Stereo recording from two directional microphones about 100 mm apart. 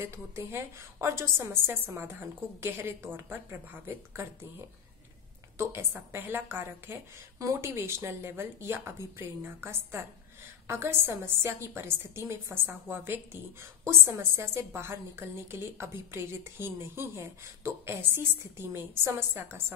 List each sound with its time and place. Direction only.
0.0 s a woman's voice: 25° right (ahead or behind)
5.6 s a woman's voice: 25° right (ahead or behind)